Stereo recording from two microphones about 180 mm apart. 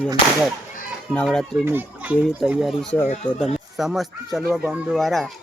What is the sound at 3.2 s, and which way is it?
Speech, 25° left (ahead or behind).